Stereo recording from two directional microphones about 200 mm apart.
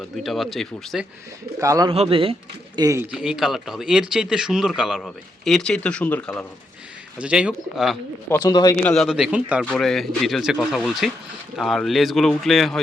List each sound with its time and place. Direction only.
0.0 s speech: centre (ahead or behind)
1.5 s speech: 15° right (ahead or behind)
1.9 s a man's voice: 25° right (ahead or behind)
2.7 s speech: 15° right (ahead or behind)
3.1 s speech: 5° right (ahead or behind)
7.2 s speech: 5° right (ahead or behind)
8.3 s a man's voice: 20° left (ahead or behind)
8.8 s speech: 5° left (ahead or behind)